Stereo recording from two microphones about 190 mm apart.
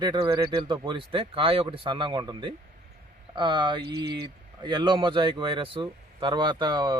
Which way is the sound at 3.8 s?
55° right (ahead or behind).